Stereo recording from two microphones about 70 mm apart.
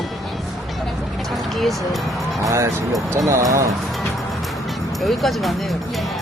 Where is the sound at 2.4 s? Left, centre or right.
Right.